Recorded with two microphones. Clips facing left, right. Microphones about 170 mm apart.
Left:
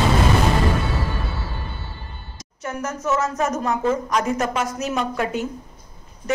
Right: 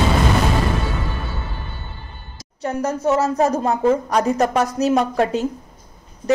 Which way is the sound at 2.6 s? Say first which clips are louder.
Right 6 dB; 35° right (ahead or behind).